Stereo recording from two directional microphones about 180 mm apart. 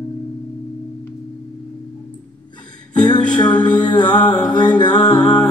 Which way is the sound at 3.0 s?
25° left (ahead or behind).